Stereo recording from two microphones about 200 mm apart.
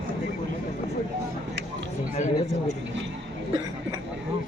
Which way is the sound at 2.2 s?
35° left (ahead or behind).